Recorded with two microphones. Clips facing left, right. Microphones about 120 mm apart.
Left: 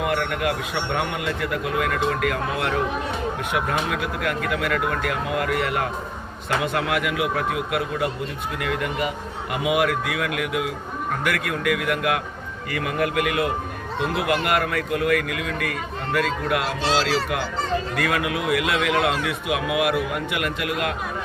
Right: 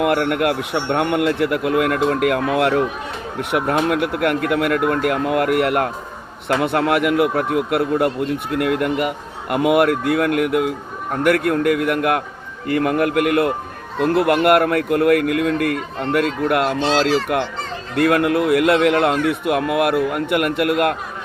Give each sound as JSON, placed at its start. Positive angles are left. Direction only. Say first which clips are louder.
{"t": 0.0, "sound": "a man's voice", "louder": "right 6 dB", "side_deg": -60}
{"t": 16.8, "sound": "a man's voice", "louder": "right 5 dB", "side_deg": -45}
{"t": 17.9, "sound": "a man's voice", "louder": "right 8 dB", "side_deg": -55}